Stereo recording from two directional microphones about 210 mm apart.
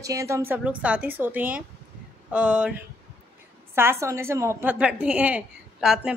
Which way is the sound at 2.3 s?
5° right (ahead or behind).